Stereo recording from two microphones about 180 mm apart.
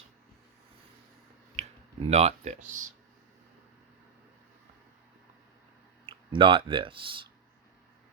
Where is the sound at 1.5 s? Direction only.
35° right (ahead or behind).